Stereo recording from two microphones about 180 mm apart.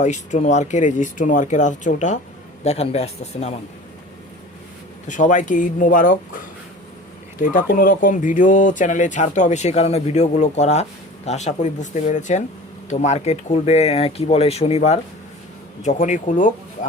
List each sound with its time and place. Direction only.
0.0 s speech: 40° left (ahead or behind)
5.0 s speech: 45° left (ahead or behind)
7.5 s speech: 50° left (ahead or behind)